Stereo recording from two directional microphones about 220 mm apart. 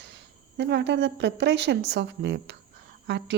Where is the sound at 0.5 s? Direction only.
50° right (ahead or behind).